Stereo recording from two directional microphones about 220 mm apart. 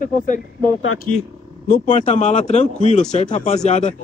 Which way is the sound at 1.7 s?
30° left (ahead or behind).